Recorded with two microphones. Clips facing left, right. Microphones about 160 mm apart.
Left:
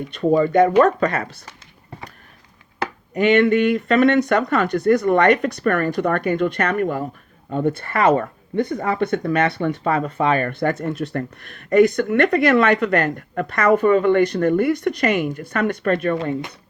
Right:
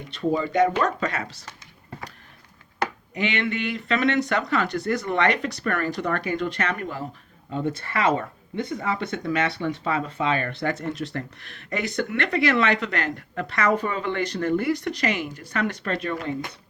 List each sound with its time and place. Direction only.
0.1 s speech: 55° left (ahead or behind)
3.2 s speech: 50° left (ahead or behind)